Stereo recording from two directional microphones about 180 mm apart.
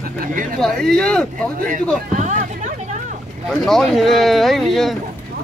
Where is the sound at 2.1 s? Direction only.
40° right (ahead or behind).